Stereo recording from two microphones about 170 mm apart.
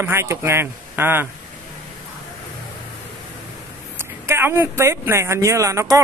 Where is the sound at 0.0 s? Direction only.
15° right (ahead or behind).